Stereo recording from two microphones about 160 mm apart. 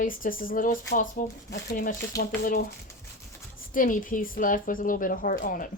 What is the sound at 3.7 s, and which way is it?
Speech, 55° left (ahead or behind).